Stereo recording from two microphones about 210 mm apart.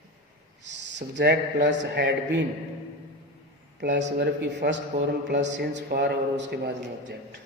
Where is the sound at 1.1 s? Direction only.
55° right (ahead or behind).